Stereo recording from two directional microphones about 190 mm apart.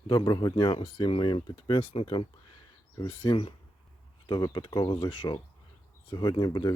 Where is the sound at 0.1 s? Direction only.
20° left (ahead or behind).